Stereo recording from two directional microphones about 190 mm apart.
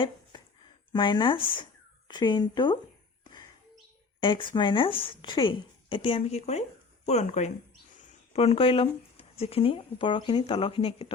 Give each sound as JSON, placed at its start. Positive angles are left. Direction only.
{"t": 0.9, "sound": "speech", "side_deg": 25}
{"t": 4.2, "sound": "speech", "side_deg": 25}